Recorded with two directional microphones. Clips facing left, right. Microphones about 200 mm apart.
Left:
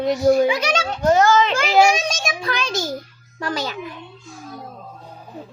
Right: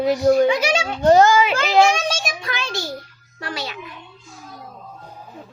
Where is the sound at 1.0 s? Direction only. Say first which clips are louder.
Right 4 dB; 30° right (ahead or behind).